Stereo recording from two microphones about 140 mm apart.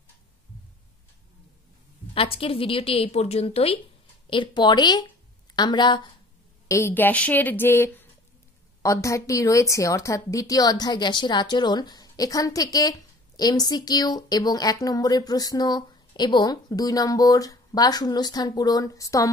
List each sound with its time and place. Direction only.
2.1 s a woman's voice: 45° left (ahead or behind)
6.7 s a woman's voice: 15° left (ahead or behind)